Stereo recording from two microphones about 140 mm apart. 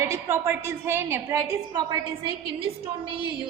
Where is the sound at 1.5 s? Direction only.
30° right (ahead or behind).